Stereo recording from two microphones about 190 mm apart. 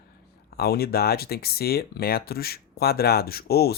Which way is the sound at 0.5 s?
55° left (ahead or behind).